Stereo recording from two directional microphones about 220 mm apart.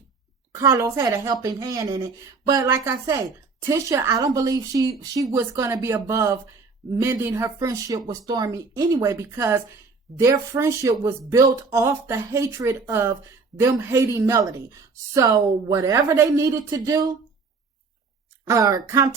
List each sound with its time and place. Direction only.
0.5 s speech: 15° right (ahead or behind)
18.4 s speech: 15° right (ahead or behind)